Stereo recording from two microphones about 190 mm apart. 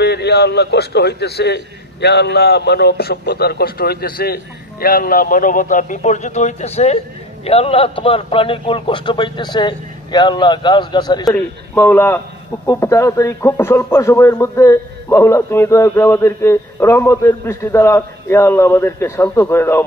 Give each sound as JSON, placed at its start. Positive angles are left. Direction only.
{"t": 0.0, "sound": "a man's voice", "side_deg": 60}